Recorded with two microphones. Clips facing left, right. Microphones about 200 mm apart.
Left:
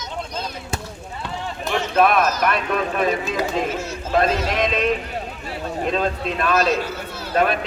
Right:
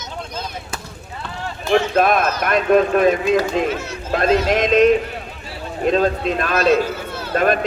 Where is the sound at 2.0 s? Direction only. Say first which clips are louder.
Even; 40° right (ahead or behind).